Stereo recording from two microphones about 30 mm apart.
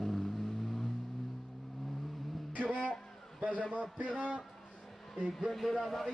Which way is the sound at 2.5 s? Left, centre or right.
Left.